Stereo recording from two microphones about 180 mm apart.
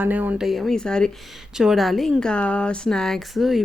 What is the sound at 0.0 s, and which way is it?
Speech, 10° right (ahead or behind).